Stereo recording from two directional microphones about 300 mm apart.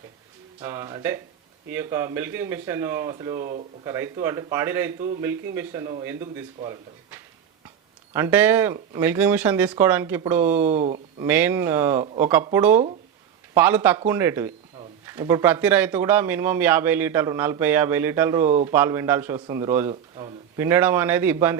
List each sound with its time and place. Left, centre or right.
0.6 s speech: centre
10.6 s speech: right
11.3 s speech: centre